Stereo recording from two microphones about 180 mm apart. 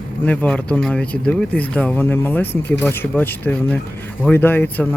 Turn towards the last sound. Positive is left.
turn(degrees=10)  # may be behind; listen again after turning